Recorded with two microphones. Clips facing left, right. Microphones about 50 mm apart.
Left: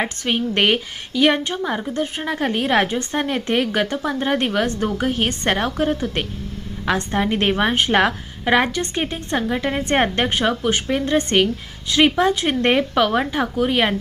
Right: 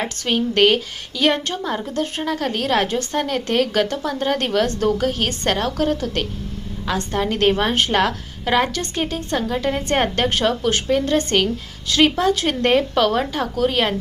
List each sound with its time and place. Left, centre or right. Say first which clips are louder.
0.0 s a woman's voice: even; left